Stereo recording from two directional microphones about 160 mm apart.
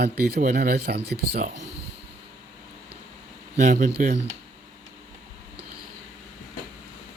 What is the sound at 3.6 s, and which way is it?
Speech, 45° right (ahead or behind).